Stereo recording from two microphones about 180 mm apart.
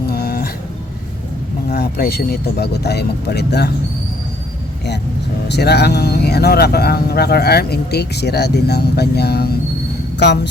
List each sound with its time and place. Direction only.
0.1 s dog: 60° left (ahead or behind)
1.7 s speech: 60° left (ahead or behind)
5.5 s speech: 65° left (ahead or behind)
10.2 s speech: 70° left (ahead or behind)